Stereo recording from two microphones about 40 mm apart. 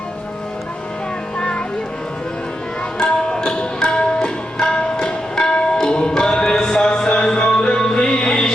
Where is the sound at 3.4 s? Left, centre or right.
Left.